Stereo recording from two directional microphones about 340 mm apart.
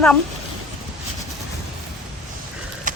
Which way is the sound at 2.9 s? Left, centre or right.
Right.